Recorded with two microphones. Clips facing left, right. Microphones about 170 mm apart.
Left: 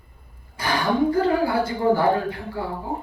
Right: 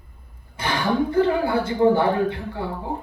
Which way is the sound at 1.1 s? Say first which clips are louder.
Right 1 dB; 25° right (ahead or behind).